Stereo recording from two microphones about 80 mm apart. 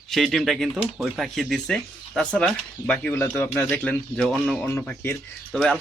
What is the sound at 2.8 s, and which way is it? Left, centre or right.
Speech, centre.